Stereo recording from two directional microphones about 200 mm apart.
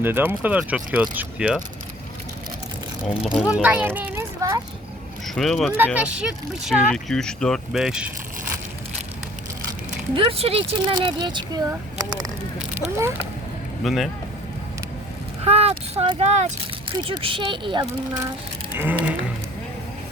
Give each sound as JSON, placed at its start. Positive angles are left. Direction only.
{"t": 0.0, "sound": "speech", "side_deg": -10}
{"t": 3.3, "sound": "a child's voice", "side_deg": -5}
{"t": 5.2, "sound": "speech", "side_deg": 0}
{"t": 10.2, "sound": "speech", "side_deg": -30}
{"t": 13.0, "sound": "speech", "side_deg": -10}
{"t": 13.8, "sound": "speech", "side_deg": 0}
{"t": 15.4, "sound": "a sound", "side_deg": -30}
{"t": 16.0, "sound": "speech", "side_deg": -30}
{"t": 18.8, "sound": "speech", "side_deg": -10}